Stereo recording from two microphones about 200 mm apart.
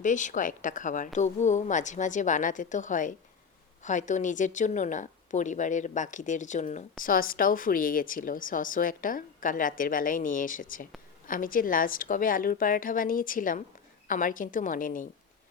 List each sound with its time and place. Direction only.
0.0 s a woman's voice: 40° left (ahead or behind)